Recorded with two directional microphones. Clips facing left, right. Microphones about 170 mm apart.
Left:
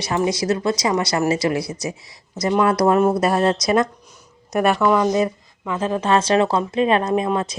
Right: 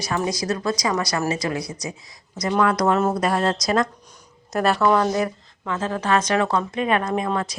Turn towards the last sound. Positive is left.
turn(degrees=20)  # may be behind; listen again after turning